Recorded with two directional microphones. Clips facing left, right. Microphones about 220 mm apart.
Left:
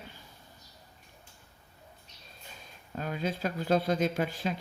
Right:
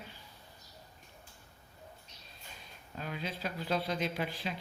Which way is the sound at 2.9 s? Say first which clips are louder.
Left 7 dB; 45° left (ahead or behind).